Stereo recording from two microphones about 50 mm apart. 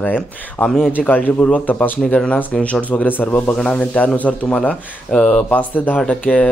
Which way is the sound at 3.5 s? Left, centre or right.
Centre.